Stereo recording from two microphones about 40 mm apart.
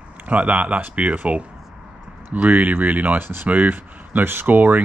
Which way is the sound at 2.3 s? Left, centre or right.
Right.